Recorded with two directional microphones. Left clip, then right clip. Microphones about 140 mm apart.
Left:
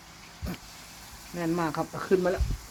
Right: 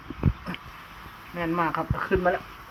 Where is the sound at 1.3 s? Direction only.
55° left (ahead or behind).